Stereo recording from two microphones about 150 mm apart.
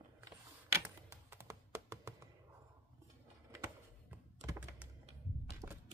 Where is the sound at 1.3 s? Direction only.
20° right (ahead or behind).